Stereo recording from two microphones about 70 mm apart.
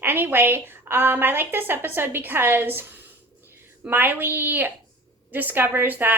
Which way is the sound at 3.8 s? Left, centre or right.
Right.